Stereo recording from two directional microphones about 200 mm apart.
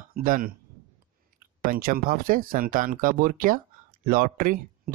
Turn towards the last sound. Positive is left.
turn(degrees=-45)  # may be behind; listen again after turning